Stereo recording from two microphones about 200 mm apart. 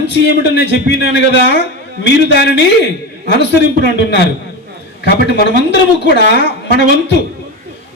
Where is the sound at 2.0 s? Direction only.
60° left (ahead or behind).